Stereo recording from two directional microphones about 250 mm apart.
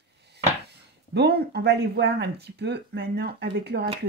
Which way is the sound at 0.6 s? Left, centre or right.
Right.